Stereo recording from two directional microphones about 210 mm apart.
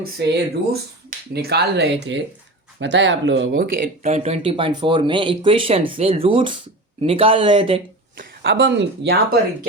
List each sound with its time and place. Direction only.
0.0 s speech: 50° right (ahead or behind)
4.0 s speech: 30° right (ahead or behind)
8.2 s speech: 50° right (ahead or behind)